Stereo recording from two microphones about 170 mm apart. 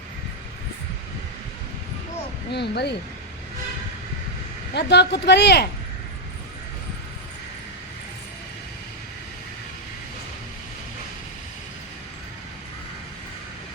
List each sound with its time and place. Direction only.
2.5 s speech: 80° left
4.7 s speech: 85° left